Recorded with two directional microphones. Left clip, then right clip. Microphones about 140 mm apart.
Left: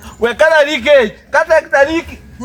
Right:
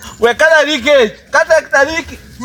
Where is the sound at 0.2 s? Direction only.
30° left (ahead or behind).